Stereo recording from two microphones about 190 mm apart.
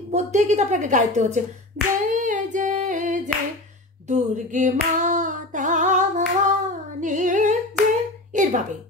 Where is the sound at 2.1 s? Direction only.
40° right (ahead or behind).